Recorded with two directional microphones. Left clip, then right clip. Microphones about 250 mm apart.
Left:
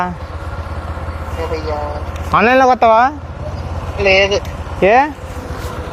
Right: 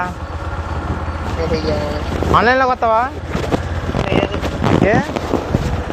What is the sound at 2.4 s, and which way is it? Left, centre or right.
Speech, left.